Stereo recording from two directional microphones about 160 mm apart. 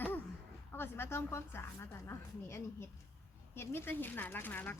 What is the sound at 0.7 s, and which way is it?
Speech, 15° left (ahead or behind).